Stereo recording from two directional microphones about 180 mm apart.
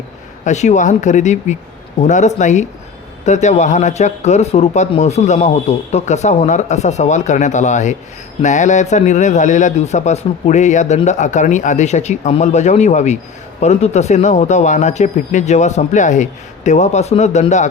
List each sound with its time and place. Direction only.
0.4 s a man's voice: 40° left (ahead or behind)